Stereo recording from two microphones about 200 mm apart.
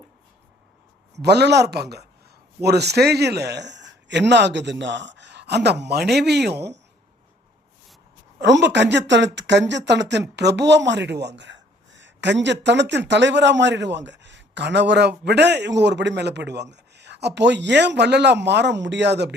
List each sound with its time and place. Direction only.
1.1 s speech: 55° right (ahead or behind)
8.4 s speech: 60° right (ahead or behind)